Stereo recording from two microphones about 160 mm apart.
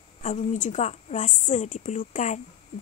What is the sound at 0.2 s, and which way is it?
Speech, 50° left (ahead or behind).